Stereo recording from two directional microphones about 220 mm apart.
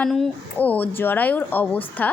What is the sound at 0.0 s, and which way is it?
A woman's voice, 5° left (ahead or behind).